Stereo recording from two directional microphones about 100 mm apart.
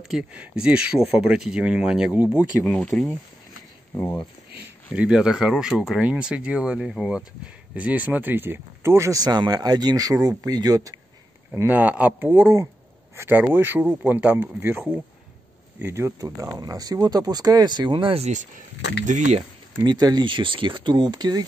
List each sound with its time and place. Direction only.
0.0 s speech: centre (ahead or behind)
0.3 s speech: 15° right (ahead or behind)
2.6 s speech: 10° left (ahead or behind)
3.9 s speech: 30° left (ahead or behind)
4.9 s speech: 10° right (ahead or behind); by 11.0 s 40° right (ahead or behind)
11.5 s speech: 15° right (ahead or behind); by 18.2 s 55° right (ahead or behind)
19.8 s speech: 45° right (ahead or behind)